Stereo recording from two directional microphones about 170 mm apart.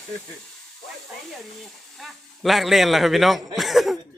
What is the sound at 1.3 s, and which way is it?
Speech, centre (ahead or behind).